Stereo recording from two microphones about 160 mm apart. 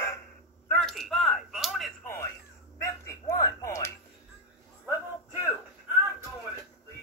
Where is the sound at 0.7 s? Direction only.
Centre (ahead or behind).